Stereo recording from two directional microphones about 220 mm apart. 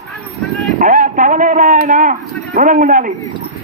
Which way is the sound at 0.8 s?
35° right (ahead or behind).